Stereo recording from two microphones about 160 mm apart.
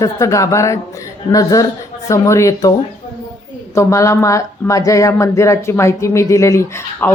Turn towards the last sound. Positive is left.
turn(degrees=15)  # may be behind; listen again after turning